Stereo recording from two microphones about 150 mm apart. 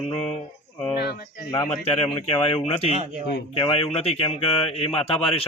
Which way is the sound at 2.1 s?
40° left (ahead or behind).